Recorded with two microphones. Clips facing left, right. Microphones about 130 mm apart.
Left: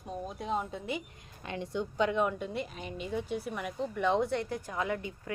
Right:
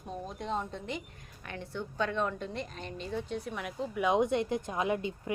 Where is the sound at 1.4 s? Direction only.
20° left (ahead or behind).